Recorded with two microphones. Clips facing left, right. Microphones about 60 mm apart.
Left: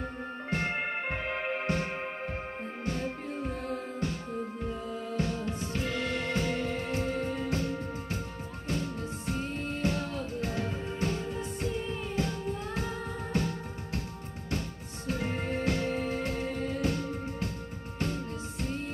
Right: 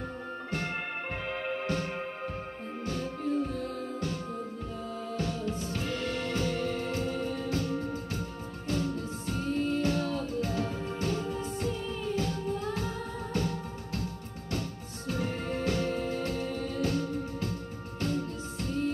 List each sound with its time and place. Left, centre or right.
0.5 s music: left
5.1 s music: left
15.0 s music: left